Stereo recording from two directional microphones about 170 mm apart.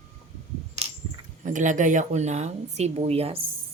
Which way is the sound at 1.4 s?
50° right (ahead or behind).